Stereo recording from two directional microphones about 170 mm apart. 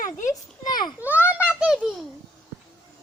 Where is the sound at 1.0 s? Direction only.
10° right (ahead or behind).